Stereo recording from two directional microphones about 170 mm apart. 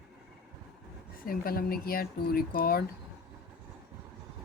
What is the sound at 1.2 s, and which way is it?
Speech, 60° left (ahead or behind).